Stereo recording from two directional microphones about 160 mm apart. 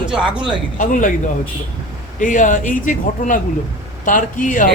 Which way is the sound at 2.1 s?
55° left (ahead or behind).